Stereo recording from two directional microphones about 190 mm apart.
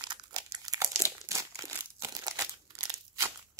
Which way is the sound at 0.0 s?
20° right (ahead or behind).